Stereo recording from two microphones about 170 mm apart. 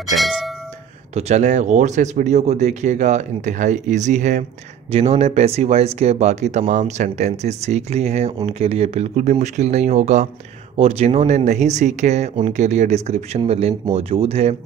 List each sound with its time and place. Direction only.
0.0 s cowbell: centre (ahead or behind)
1.1 s speech: 40° right (ahead or behind)